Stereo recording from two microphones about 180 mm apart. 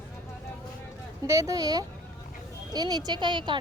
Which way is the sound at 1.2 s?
15° right (ahead or behind).